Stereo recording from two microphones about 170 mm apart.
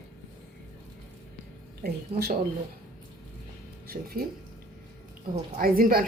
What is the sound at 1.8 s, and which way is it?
Speech, 65° right (ahead or behind).